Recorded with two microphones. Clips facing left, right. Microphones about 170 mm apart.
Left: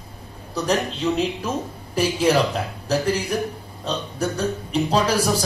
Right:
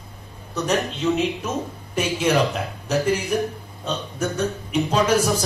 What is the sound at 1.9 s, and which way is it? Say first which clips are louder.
Speech: left 2 dB; 35° left (ahead or behind).